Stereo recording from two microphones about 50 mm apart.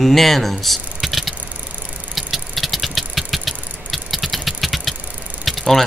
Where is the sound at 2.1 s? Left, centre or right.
Centre.